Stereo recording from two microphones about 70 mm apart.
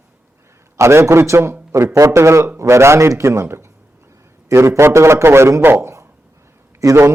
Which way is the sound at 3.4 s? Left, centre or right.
Right.